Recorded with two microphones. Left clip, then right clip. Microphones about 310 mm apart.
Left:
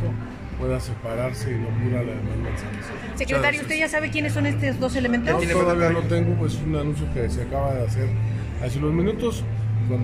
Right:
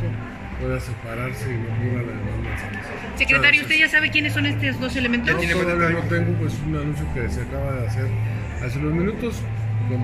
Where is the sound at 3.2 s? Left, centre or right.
Left.